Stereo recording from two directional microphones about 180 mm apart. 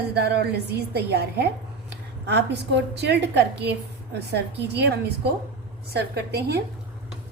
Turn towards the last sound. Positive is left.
turn(degrees=-65)  # may be behind; listen again after turning